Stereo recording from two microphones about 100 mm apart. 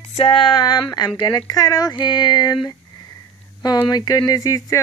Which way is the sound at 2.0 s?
45° left (ahead or behind).